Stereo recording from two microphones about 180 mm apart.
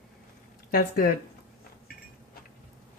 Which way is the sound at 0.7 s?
55° left (ahead or behind).